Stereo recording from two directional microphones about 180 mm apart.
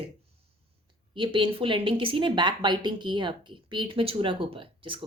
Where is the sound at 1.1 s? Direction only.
30° right (ahead or behind).